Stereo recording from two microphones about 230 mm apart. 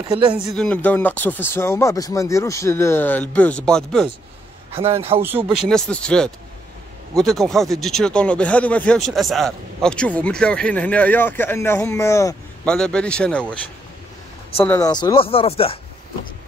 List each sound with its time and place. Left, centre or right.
0.6 s speech: centre
5.1 s speech: right
5.7 s speech: centre
14.6 s speech: centre